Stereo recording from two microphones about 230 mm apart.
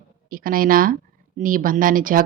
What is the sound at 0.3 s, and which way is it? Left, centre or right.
Speech, right.